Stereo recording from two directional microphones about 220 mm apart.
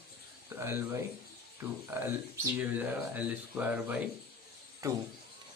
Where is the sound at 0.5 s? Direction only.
10° right (ahead or behind).